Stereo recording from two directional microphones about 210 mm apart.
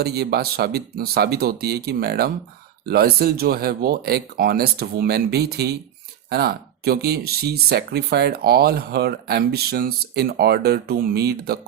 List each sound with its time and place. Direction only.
0.0 s speech: 50° right (ahead or behind)